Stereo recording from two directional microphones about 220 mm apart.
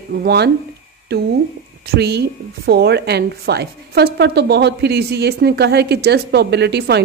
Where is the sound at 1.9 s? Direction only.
45° right (ahead or behind).